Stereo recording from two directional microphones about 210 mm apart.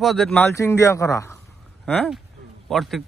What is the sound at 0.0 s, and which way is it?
A man's voice, centre (ahead or behind).